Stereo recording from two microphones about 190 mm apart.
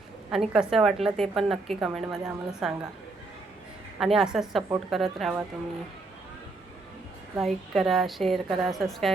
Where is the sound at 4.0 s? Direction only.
Centre (ahead or behind).